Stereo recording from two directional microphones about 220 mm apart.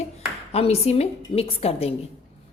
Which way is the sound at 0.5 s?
30° left (ahead or behind).